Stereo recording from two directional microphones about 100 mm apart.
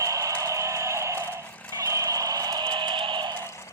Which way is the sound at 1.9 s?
35° right (ahead or behind).